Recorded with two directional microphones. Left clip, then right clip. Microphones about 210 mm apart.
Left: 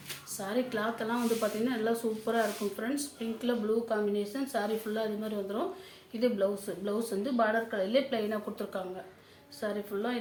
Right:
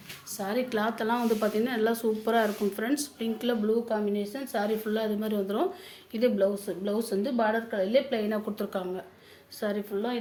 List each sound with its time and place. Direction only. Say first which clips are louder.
0.3 s speech: right 4 dB; 45° right (ahead or behind)
3.8 s a woman's voice: right 1 dB; 30° right (ahead or behind); by 9.8 s 45° right (ahead or behind)